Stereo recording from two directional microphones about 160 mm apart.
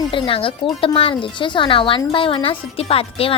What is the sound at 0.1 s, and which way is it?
A child's voice, 35° left (ahead or behind).